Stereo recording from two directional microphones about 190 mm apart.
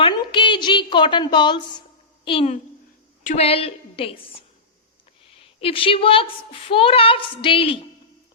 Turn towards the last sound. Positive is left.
turn(degrees=30)  # may be behind; listen again after turning